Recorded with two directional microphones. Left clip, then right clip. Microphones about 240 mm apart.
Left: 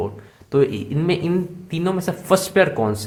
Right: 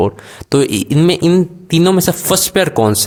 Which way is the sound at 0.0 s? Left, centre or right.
Right.